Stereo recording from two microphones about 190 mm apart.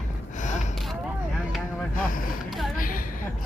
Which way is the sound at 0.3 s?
40° left (ahead or behind).